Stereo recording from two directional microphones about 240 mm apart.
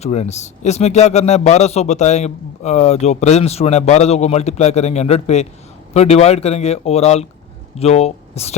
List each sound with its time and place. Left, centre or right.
0.0 s a man's voice: left